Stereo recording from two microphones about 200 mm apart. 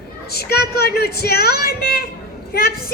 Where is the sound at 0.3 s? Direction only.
50° left (ahead or behind).